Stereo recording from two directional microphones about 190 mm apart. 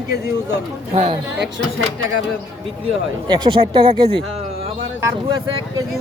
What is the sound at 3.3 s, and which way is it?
Speech, 25° right (ahead or behind).